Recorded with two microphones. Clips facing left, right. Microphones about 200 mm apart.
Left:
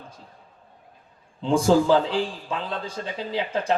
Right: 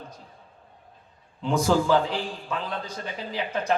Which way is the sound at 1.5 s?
30° left (ahead or behind).